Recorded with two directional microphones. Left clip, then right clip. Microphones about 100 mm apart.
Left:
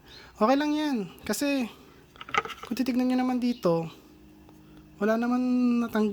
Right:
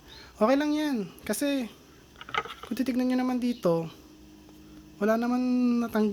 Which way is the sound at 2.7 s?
30° left (ahead or behind).